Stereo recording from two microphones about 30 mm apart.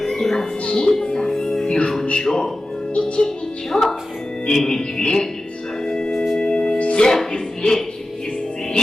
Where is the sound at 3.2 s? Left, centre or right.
Centre.